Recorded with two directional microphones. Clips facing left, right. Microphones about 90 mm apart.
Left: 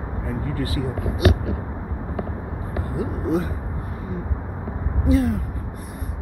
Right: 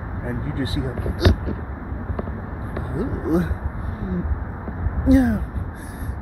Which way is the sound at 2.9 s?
25° right (ahead or behind).